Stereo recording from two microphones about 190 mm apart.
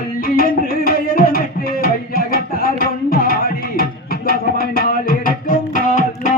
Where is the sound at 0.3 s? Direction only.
50° left (ahead or behind).